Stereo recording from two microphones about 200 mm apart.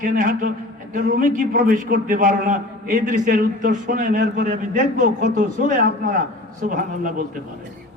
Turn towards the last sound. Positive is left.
turn(degrees=-45)  # may be behind; listen again after turning